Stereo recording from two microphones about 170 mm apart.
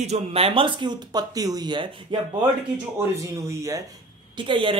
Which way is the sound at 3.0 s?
15° right (ahead or behind).